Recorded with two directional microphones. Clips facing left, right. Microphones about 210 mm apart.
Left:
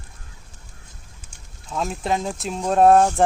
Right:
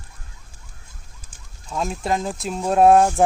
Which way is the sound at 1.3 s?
Centre (ahead or behind).